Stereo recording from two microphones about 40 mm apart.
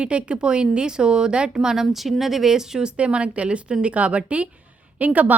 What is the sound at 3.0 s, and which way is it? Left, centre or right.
Speech, right.